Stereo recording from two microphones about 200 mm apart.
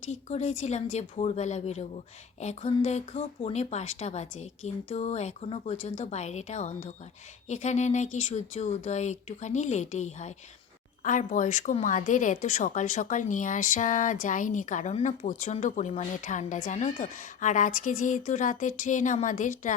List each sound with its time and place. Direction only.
0.1 s speech: 35° left (ahead or behind)